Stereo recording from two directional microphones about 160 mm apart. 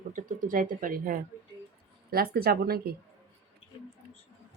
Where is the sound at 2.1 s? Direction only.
70° right (ahead or behind).